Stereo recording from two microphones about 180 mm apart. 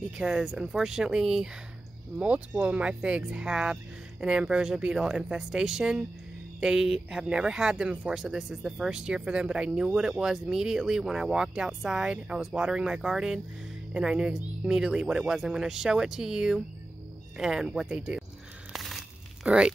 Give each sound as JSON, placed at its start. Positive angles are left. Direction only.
{"t": 0.2, "sound": "speech", "side_deg": -5}
{"t": 18.7, "sound": "crumpling", "side_deg": 0}